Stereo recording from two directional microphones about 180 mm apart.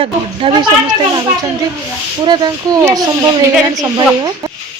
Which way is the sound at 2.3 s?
25° right (ahead or behind).